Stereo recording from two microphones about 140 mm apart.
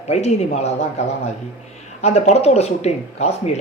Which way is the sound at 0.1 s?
50° left (ahead or behind).